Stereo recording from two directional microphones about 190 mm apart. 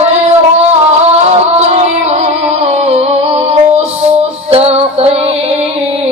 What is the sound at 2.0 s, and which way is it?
Music, 35° right (ahead or behind).